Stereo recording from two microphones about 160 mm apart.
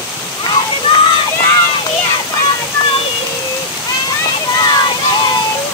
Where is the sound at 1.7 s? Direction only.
30° left (ahead or behind).